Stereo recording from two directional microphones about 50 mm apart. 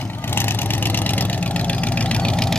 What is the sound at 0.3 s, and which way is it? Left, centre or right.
Vehicle, left.